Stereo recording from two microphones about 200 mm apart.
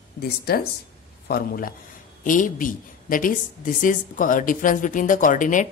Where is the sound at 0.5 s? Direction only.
50° left (ahead or behind).